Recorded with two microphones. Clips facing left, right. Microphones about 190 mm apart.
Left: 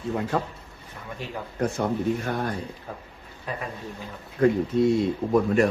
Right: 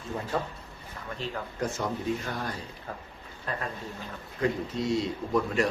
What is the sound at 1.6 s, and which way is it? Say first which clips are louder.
Speech: left 6 dB; 60° left (ahead or behind).